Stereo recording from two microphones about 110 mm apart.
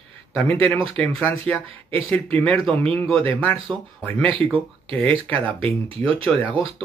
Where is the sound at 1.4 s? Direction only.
60° right (ahead or behind).